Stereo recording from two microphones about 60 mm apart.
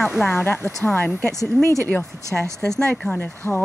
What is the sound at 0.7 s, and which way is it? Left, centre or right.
Speech, centre.